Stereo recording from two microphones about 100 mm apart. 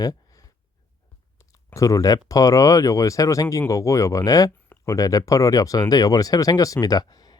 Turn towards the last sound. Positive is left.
turn(degrees=40)  # may be behind; listen again after turning